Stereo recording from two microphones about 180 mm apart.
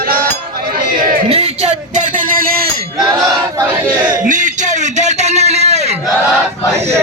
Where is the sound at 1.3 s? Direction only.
35° right (ahead or behind).